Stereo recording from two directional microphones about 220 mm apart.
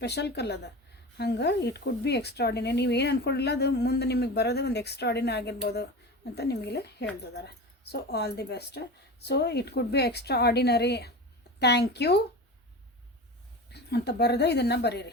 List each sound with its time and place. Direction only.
0.0 s speech: 50° left (ahead or behind)
13.7 s speech: 50° left (ahead or behind)